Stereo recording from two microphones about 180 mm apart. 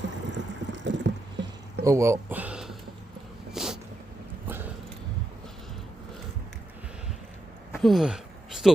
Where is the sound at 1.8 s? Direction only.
15° right (ahead or behind).